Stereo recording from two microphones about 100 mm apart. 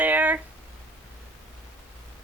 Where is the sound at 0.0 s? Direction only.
15° right (ahead or behind).